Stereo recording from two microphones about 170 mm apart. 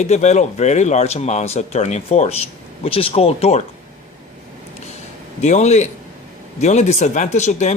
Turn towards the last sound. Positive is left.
turn(degrees=45)  # may be behind; listen again after turning